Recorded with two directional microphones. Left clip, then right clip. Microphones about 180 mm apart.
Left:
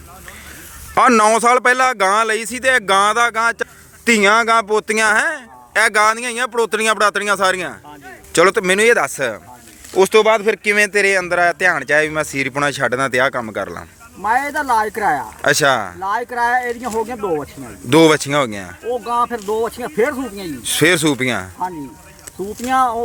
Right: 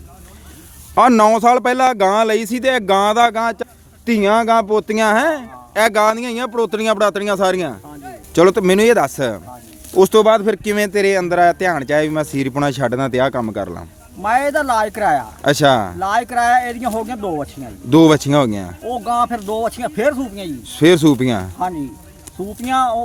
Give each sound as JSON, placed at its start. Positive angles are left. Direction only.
{"t": 0.9, "sound": "speech", "side_deg": -5}
{"t": 4.9, "sound": "speech", "side_deg": -5}
{"t": 9.9, "sound": "speech", "side_deg": -25}
{"t": 10.8, "sound": "speech", "side_deg": -10}
{"t": 14.2, "sound": "speech", "side_deg": -25}
{"t": 15.4, "sound": "speech", "side_deg": -5}
{"t": 16.0, "sound": "speech", "side_deg": -25}
{"t": 17.8, "sound": "speech", "side_deg": -5}
{"t": 18.9, "sound": "speech", "side_deg": -25}
{"t": 20.7, "sound": "speech", "side_deg": -10}
{"t": 22.6, "sound": "speech", "side_deg": -25}